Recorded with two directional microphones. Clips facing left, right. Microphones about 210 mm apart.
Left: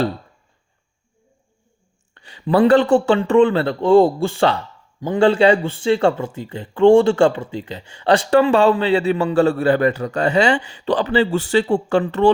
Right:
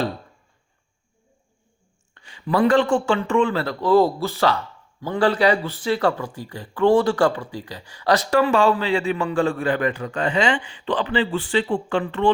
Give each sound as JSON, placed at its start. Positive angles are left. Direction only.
{"t": 2.2, "sound": "speech", "side_deg": 35}